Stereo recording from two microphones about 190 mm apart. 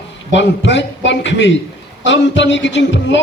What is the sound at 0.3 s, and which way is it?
A man's voice, 70° left (ahead or behind).